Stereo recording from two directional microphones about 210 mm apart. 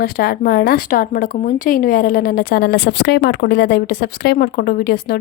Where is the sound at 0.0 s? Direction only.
45° left (ahead or behind).